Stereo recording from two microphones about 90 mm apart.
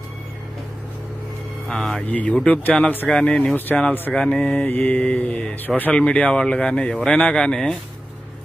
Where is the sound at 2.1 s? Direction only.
15° left (ahead or behind).